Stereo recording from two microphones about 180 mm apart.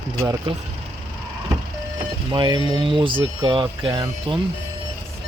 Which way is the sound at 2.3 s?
25° right (ahead or behind).